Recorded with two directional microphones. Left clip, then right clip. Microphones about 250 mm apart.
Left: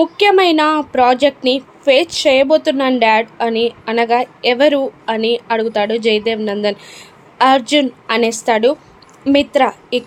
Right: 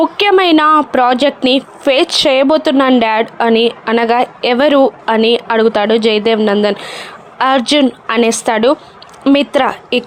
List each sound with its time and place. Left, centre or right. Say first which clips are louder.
0.0 s speech: right 1 dB; right